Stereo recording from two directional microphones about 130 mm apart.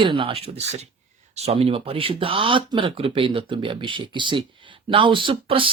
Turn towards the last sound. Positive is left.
turn(degrees=-45)  # may be behind; listen again after turning